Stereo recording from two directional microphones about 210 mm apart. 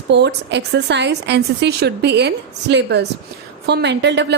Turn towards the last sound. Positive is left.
turn(degrees=-55)  # may be behind; listen again after turning